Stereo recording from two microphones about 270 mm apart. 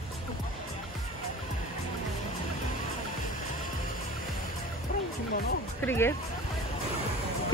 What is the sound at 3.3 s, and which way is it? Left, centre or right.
Music, left.